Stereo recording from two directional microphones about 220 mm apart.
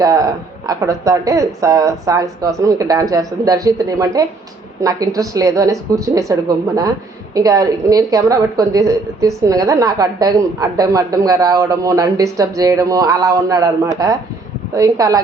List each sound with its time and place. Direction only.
0.0 s a woman's voice: 15° right (ahead or behind)
7.3 s a woman's voice: 15° right (ahead or behind)